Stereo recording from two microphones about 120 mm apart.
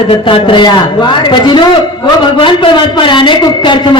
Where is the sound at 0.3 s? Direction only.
45° left (ahead or behind).